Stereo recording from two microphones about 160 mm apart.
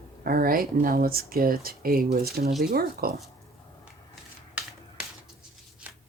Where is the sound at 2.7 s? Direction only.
70° right (ahead or behind).